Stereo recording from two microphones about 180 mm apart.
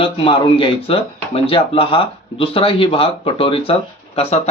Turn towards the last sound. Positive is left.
turn(degrees=35)  # may be behind; listen again after turning